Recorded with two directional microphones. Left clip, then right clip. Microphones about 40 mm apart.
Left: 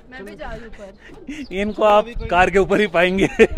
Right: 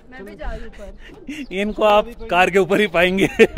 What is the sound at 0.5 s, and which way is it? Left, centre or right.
A man's voice, right.